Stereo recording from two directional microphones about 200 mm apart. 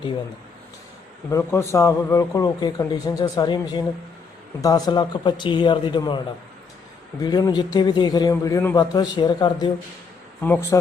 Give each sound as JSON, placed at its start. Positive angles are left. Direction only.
{"t": 1.3, "sound": "a man's voice", "side_deg": 10}